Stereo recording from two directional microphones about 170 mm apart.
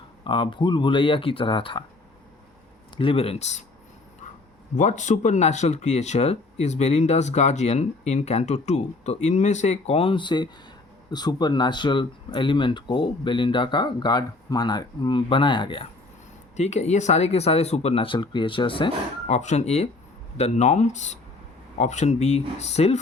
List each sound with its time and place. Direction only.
0.3 s speech: 30° left (ahead or behind)
2.9 s speech: 30° left (ahead or behind)
4.8 s speech: 45° left (ahead or behind); by 15.9 s 30° left (ahead or behind)
16.6 s speech: 40° left (ahead or behind)
19.3 s speech: 40° left (ahead or behind)